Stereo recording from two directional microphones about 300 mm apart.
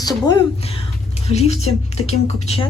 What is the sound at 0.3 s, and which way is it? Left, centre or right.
Speech, centre.